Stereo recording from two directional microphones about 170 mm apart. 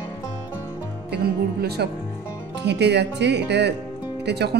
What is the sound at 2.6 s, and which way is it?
Speech, 85° right.